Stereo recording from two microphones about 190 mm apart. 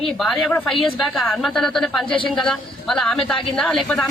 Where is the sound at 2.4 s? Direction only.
5° left (ahead or behind).